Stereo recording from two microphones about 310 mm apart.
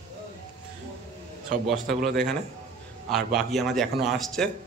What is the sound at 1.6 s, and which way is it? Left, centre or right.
Speech, centre.